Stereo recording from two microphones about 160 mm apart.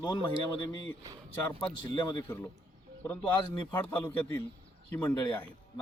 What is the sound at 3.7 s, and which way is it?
Speech, 10° left (ahead or behind).